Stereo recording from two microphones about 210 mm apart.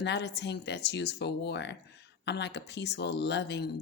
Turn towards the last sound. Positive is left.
turn(degrees=55)  # may be behind; listen again after turning